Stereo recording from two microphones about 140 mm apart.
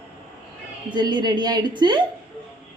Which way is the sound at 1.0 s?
30° right (ahead or behind).